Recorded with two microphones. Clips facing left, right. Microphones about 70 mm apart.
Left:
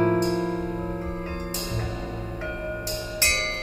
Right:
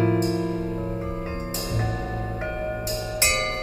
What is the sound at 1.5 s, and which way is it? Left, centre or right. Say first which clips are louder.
Music: right 3 dB; right.